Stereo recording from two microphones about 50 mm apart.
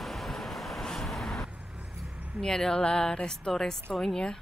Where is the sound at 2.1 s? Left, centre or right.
Right.